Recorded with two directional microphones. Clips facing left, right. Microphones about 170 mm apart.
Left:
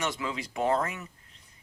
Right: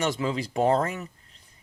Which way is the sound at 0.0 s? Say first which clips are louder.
Right 6 dB; 35° right (ahead or behind).